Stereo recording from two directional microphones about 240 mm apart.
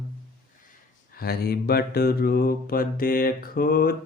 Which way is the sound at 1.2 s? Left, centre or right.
Left.